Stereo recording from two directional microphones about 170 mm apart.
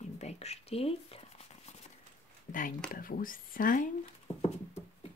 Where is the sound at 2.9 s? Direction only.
55° left (ahead or behind).